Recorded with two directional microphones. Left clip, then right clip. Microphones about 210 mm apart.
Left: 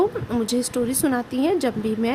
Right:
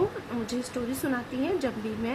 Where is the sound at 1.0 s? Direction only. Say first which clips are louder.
Left 7 dB; 55° left (ahead or behind).